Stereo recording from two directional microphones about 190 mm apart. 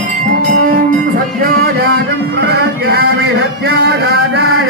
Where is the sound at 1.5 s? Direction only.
55° right (ahead or behind).